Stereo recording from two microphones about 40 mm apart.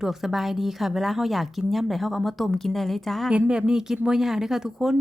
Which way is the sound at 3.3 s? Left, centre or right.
Right.